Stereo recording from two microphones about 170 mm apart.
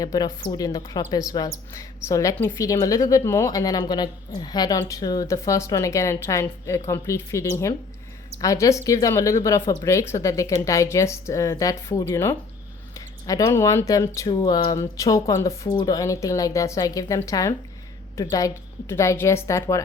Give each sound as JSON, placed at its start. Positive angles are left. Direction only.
{"t": 0.0, "sound": "a woman's voice", "side_deg": 25}